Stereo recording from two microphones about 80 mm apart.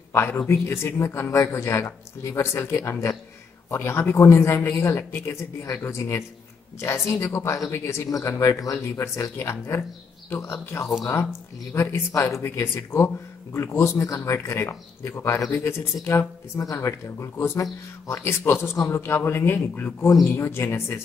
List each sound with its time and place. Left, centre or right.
0.1 s a man's voice: left